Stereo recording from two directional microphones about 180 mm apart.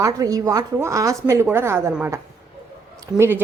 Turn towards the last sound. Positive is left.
turn(degrees=-10)  # may be behind; listen again after turning